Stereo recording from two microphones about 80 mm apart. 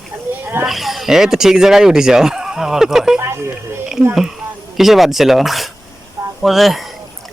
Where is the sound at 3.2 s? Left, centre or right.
Right.